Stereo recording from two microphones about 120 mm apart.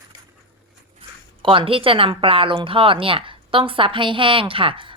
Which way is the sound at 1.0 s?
50° right (ahead or behind).